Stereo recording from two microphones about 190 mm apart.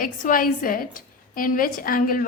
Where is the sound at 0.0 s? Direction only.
45° left (ahead or behind).